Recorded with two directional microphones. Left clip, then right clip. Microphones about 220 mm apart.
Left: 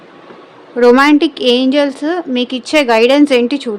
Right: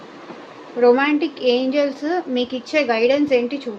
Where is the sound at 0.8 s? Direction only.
45° left (ahead or behind).